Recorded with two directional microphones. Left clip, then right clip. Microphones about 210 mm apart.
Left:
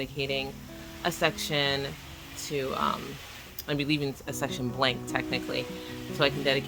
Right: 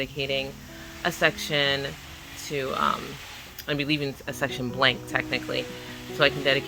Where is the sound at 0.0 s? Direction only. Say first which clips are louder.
Right 3 dB; 5° left (ahead or behind).